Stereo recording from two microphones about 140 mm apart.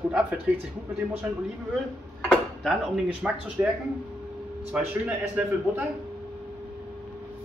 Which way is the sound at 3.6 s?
15° right (ahead or behind).